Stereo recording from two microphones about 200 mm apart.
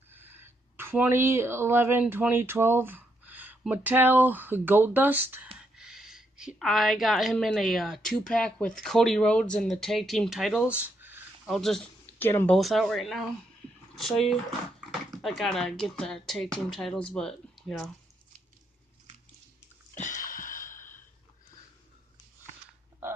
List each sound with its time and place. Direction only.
0.1 s a woman's voice: 10° right (ahead or behind); by 12.5 s 10° left (ahead or behind)
12.5 s speech: centre (ahead or behind)
14.9 s dog: centre (ahead or behind)
15.8 s speech: 5° left (ahead or behind)
19.9 s a sound: 40° left (ahead or behind)